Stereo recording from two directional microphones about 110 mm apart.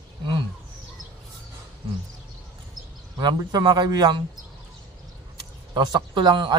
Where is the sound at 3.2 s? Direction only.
40° right (ahead or behind).